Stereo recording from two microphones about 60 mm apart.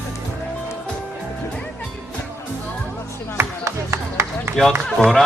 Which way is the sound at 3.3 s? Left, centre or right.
Right.